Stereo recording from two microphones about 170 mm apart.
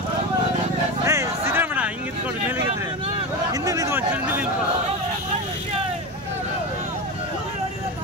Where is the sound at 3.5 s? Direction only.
20° right (ahead or behind).